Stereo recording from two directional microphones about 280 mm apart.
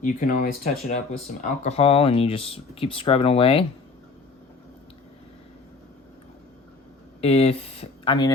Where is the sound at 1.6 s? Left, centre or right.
Left.